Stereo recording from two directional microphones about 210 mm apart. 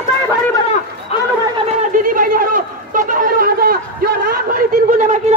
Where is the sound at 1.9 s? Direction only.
40° right (ahead or behind).